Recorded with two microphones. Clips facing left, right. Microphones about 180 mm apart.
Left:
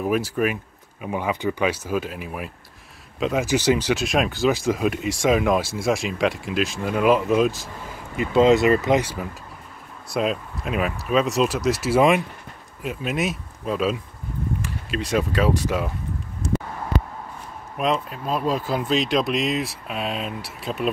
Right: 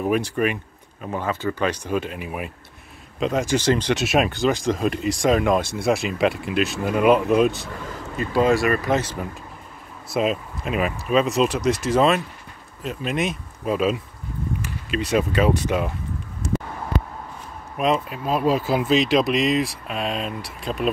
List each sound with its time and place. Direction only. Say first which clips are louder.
0.0 s speech: right 1 dB; centre (ahead or behind)
4.0 s speech: right 1 dB; centre (ahead or behind)
8.2 s speech: left 3 dB; 20° left (ahead or behind)
9.0 s speech: right 1 dB; 10° left (ahead or behind)
10.1 s speech: right 1 dB; centre (ahead or behind)
17.7 s speech: right 2 dB; 5° right (ahead or behind)